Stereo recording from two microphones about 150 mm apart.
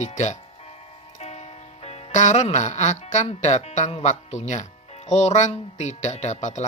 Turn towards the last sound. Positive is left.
turn(degrees=50)  # may be behind; listen again after turning